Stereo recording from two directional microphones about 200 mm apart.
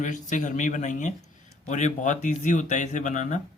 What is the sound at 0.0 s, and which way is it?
Speech, 40° left (ahead or behind).